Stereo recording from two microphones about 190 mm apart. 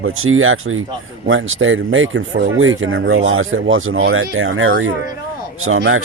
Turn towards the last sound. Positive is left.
turn(degrees=-90)